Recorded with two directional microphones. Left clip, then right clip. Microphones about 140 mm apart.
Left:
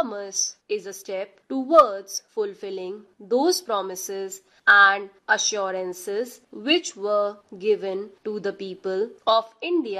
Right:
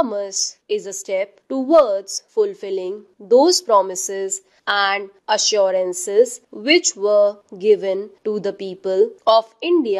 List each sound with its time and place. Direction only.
0.0 s a woman's voice: 25° right (ahead or behind)